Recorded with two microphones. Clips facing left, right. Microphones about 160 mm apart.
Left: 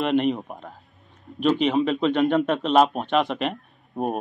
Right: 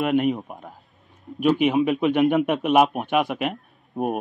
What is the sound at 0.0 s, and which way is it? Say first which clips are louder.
Speech: right 1 dB; 5° right (ahead or behind).